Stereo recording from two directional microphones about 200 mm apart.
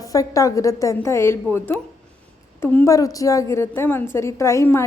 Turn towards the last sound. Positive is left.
turn(degrees=10)  # may be behind; listen again after turning